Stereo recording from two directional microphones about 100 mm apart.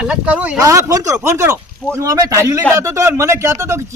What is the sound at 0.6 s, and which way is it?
Speech, 30° right (ahead or behind).